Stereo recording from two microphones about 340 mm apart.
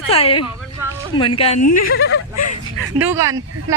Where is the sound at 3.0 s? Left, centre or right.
Centre.